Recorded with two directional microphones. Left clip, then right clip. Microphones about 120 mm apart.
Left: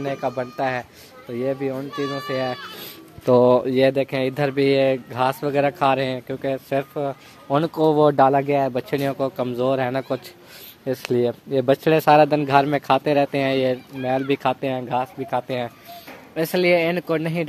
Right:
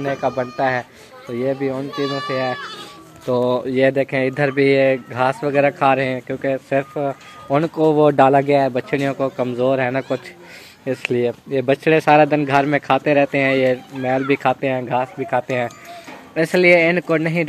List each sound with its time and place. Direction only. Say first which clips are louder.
0.4 s speech: right 5 dB; 5° left (ahead or behind)
1.3 s speech: right 3 dB; 15° left (ahead or behind)
2.1 s a man's voice: right 3 dB; 30° left (ahead or behind)
3.9 s a man's voice: right 3 dB; 25° left (ahead or behind)
8.1 s speech: right 4 dB; centre (ahead or behind)
8.7 s a man's voice: right 3 dB; 30° left (ahead or behind)
11.1 s a man's voice: left 1 dB; 45° left (ahead or behind); by 17.5 s 20° left (ahead or behind)